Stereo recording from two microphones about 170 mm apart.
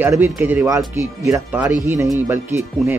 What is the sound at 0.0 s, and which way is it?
Speech, 10° right (ahead or behind).